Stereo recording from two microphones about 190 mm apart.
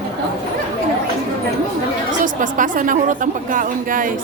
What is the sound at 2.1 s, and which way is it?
A woman's voice, 45° right (ahead or behind).